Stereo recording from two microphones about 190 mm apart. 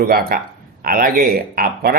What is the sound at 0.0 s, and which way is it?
Speech, 50° right (ahead or behind).